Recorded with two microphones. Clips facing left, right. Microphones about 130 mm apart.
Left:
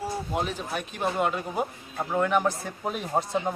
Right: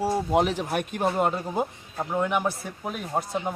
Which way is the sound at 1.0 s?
35° right (ahead or behind).